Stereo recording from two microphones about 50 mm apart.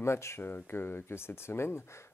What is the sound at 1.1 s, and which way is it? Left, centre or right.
Speech, left.